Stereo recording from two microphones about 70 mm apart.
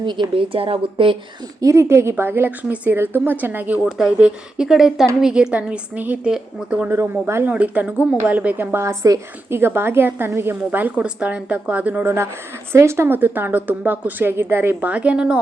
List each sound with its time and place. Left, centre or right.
0.0 s speech: right
1.6 s a woman's voice: right
3.8 s speech: centre
6.9 s a woman's voice: right
7.4 s speech: right
8.8 s a woman's voice: right
12.0 s a woman's voice: right
14.8 s speech: centre